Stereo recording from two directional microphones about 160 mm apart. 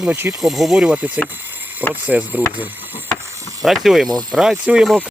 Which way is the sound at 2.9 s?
10° left (ahead or behind).